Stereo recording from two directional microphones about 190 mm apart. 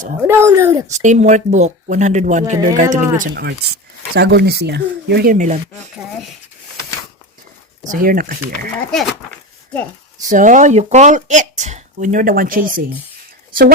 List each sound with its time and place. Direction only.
0.2 s speech: 15° right (ahead or behind)
0.9 s speech: 40° right (ahead or behind)
4.1 s speech: 60° right (ahead or behind); by 5.9 s 40° right (ahead or behind)
7.9 s speech: 45° right (ahead or behind)
10.2 s speech: 40° right (ahead or behind)